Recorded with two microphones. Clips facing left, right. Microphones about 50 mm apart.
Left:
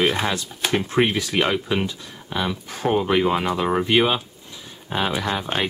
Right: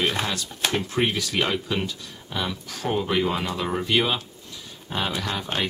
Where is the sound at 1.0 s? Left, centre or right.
Left.